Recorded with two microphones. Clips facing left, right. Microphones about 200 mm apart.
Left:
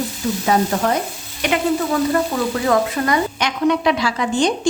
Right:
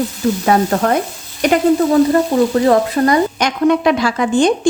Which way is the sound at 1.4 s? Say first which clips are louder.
Right 6 dB; 40° right (ahead or behind).